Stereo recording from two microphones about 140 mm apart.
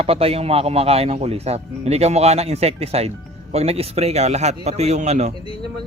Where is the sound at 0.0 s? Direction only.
45° right (ahead or behind).